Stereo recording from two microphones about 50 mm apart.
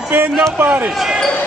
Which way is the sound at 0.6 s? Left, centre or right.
Right.